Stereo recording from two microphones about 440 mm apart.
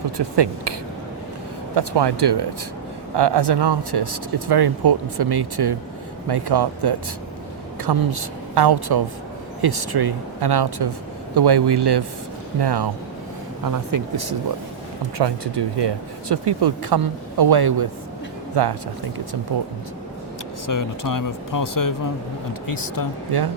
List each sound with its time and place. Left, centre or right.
0.2 s speech: right
1.7 s speech: right
15.2 s speech: right
20.7 s speech: left